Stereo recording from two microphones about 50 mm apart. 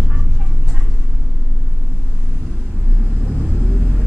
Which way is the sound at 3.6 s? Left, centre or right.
Centre.